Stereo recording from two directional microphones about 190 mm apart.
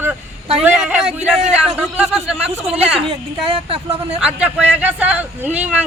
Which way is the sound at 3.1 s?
30° right (ahead or behind).